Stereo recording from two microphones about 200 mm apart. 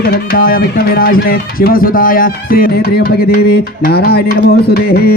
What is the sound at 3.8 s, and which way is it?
Music, 50° left (ahead or behind).